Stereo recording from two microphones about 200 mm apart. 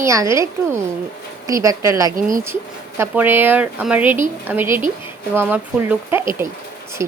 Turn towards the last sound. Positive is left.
turn(degrees=-10)  # may be behind; listen again after turning